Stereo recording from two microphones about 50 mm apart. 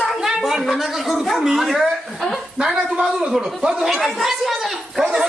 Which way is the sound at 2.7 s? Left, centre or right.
Right.